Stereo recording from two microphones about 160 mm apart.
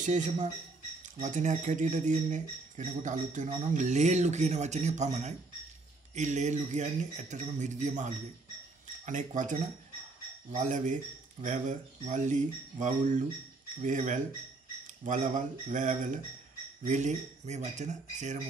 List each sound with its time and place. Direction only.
0.0 s speech: 50° right (ahead or behind)